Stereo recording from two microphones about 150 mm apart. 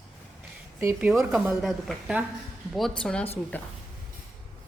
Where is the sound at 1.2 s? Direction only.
5° right (ahead or behind).